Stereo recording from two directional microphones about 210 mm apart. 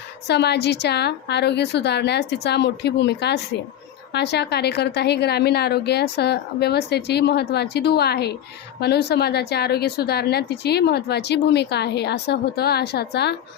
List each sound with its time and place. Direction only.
0.3 s a woman's voice: 55° left (ahead or behind)